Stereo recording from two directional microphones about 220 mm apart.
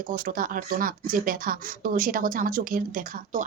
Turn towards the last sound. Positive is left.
turn(degrees=-40)  # may be behind; listen again after turning